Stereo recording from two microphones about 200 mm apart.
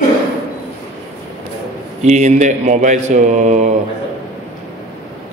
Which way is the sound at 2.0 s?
35° right (ahead or behind).